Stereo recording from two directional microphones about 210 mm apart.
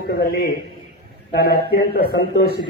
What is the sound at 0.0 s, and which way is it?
Speech, 50° left (ahead or behind).